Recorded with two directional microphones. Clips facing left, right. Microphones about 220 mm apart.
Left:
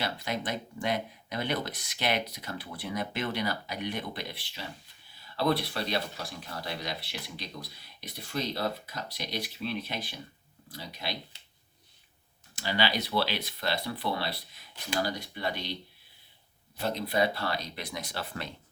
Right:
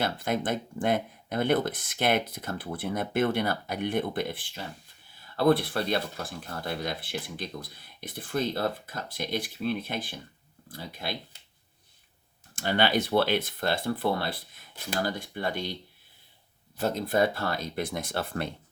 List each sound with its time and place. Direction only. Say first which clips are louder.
0.0 s speech: right 5 dB; 50° right (ahead or behind)
12.5 s speech: right 5 dB; 50° right (ahead or behind)
16.8 s speech: right 3 dB; 50° right (ahead or behind)